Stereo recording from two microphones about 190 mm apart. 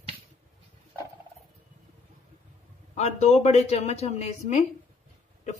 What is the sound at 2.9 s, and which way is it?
A woman's voice, 35° left (ahead or behind).